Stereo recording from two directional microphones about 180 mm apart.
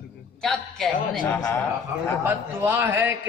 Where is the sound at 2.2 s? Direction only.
10° right (ahead or behind).